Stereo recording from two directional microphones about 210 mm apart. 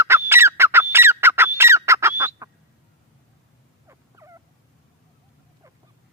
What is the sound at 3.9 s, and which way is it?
Frog, 15° right (ahead or behind).